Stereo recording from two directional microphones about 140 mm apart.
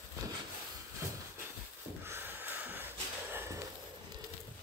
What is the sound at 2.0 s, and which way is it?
Snort, 15° right (ahead or behind).